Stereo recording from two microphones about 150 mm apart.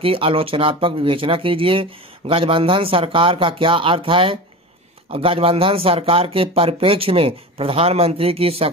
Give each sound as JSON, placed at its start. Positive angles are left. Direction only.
{"t": 0.0, "sound": "speech", "side_deg": -40}